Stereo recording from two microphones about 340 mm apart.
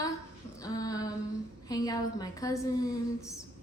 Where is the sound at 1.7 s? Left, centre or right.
Centre.